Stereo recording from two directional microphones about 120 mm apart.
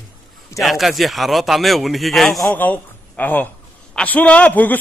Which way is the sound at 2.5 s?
15° left (ahead or behind).